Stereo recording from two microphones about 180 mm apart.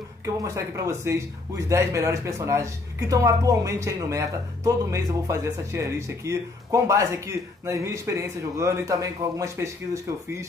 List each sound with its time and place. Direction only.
0.2 s speech: 15° right (ahead or behind)